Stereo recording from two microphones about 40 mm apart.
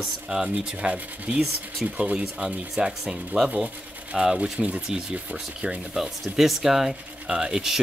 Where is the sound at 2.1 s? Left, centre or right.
Centre.